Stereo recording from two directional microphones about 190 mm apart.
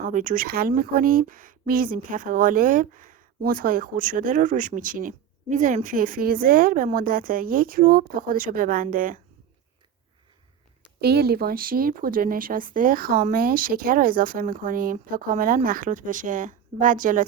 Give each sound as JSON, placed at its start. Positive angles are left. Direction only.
{"t": 0.0, "sound": "speech", "side_deg": -40}
{"t": 11.0, "sound": "speech", "side_deg": -55}